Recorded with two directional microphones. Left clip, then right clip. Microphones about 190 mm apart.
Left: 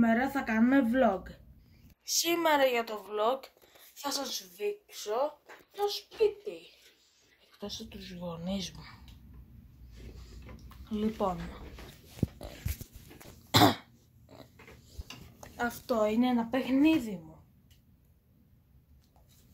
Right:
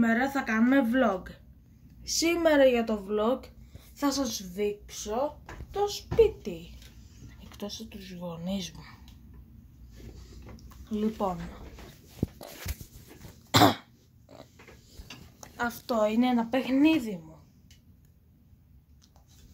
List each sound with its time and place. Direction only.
0.0 s speech: 5° right (ahead or behind)
4.6 s speech: centre (ahead or behind)
7.6 s speech: 15° right (ahead or behind)
10.5 s speech: 10° right (ahead or behind)
13.5 s cough: 10° right (ahead or behind)
15.4 s speech: 20° right (ahead or behind)